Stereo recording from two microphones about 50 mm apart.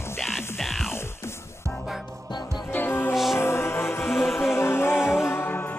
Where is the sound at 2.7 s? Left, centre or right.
Left.